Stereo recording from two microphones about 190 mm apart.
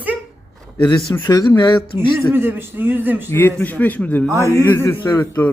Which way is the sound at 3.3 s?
10° left (ahead or behind).